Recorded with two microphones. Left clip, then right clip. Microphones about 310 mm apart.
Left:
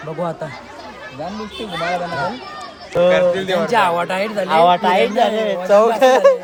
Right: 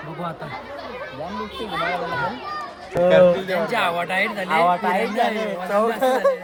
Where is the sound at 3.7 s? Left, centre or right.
Centre.